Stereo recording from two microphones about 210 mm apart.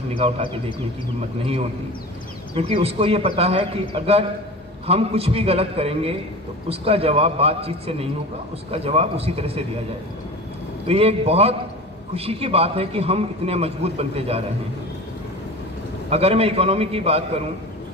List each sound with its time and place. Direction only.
1.4 s a man's voice: 30° right (ahead or behind)
10.9 s a man's voice: 30° right (ahead or behind)
16.1 s a man's voice: 30° right (ahead or behind)